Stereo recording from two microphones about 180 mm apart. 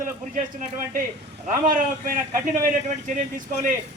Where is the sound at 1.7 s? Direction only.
50° right (ahead or behind).